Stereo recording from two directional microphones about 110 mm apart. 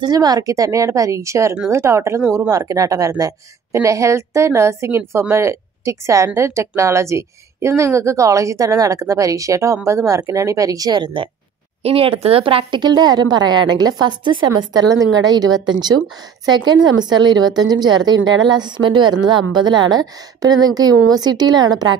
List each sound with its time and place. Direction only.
0.0 s a woman's voice: 35° right (ahead or behind)
11.8 s a woman's voice: 60° right (ahead or behind); by 21.8 s 40° right (ahead or behind)